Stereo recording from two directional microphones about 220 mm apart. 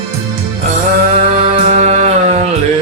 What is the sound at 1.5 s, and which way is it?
Music, 30° right (ahead or behind).